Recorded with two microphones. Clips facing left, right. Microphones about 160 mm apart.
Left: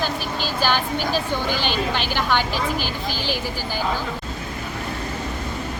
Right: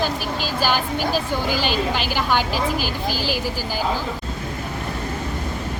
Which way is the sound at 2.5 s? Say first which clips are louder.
Right 2 dB; 45° right (ahead or behind).